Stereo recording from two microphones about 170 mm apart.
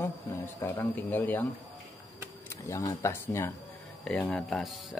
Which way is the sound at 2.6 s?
15° left (ahead or behind).